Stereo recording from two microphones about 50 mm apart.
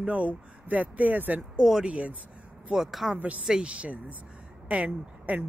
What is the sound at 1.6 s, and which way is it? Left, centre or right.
Speech, centre.